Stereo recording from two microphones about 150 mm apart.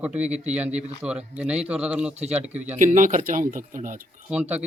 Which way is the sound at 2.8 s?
60° right (ahead or behind).